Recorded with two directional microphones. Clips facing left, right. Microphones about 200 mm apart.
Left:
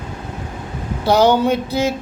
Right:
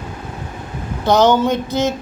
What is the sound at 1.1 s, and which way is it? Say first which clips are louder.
Speech: even; 10° left (ahead or behind).